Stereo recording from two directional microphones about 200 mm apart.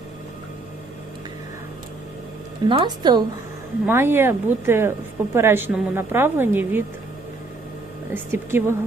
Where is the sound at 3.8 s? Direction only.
10° right (ahead or behind).